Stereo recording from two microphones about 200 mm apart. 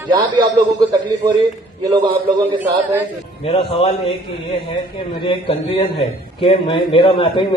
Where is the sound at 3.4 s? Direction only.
25° left (ahead or behind).